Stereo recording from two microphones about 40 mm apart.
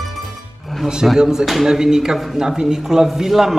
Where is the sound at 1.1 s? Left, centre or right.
Centre.